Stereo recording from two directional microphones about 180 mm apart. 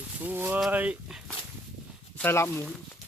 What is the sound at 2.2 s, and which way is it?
Speech, 15° left (ahead or behind).